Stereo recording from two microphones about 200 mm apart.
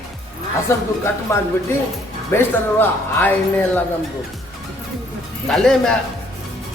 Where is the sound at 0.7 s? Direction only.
15° left (ahead or behind).